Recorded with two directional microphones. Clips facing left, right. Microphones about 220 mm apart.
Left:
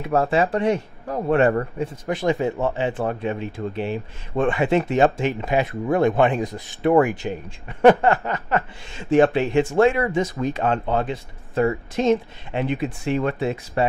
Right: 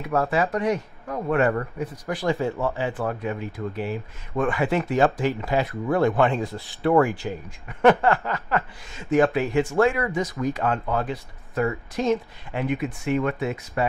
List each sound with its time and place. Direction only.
0.0 s speech: 30° left (ahead or behind)